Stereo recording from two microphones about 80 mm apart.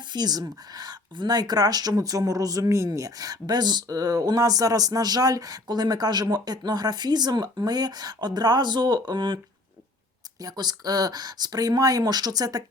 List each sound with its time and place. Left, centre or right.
0.1 s speech: right
10.4 s speech: right